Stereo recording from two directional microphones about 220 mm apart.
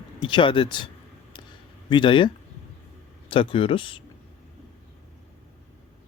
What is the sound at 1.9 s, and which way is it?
Speech, 20° left (ahead or behind).